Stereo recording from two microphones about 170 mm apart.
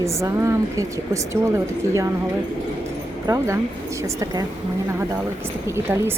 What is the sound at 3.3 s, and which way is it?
Speech, 15° right (ahead or behind).